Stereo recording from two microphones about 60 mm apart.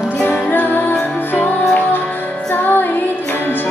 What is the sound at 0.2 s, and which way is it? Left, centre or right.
Music, left.